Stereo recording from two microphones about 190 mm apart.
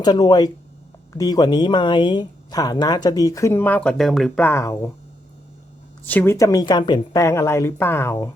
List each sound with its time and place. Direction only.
0.0 s speech: 20° left (ahead or behind)
6.1 s a woman's voice: 10° left (ahead or behind)